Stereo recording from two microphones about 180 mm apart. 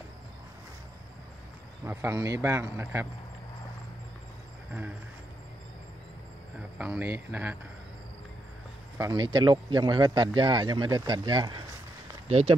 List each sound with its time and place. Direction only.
1.9 s a man's voice: 15° right (ahead or behind)
6.8 s a man's voice: 10° right (ahead or behind)
8.9 s speech: 20° right (ahead or behind); by 12.5 s 35° right (ahead or behind)